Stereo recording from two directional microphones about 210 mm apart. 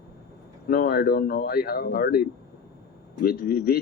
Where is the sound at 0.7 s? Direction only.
45° left (ahead or behind).